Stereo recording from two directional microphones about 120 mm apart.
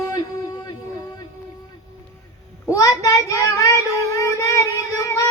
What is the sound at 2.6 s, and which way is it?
Child singing, 25° left (ahead or behind).